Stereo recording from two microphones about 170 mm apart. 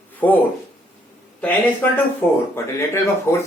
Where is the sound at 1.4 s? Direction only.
10° left (ahead or behind).